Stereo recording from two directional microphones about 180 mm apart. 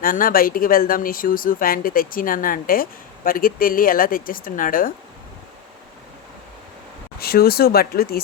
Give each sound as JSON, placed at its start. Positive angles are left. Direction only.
{"t": 0.0, "sound": "speech", "side_deg": 50}
{"t": 7.2, "sound": "speech", "side_deg": 60}